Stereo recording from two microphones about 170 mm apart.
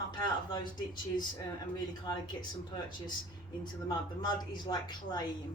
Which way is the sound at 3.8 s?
25° left (ahead or behind).